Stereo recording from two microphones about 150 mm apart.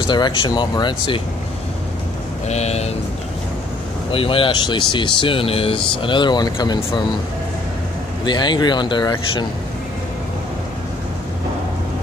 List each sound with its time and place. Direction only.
0.0 s speech: 30° left (ahead or behind)
2.4 s speech: 45° left (ahead or behind)
4.1 s speech: 35° left (ahead or behind)
8.3 s speech: 30° left (ahead or behind)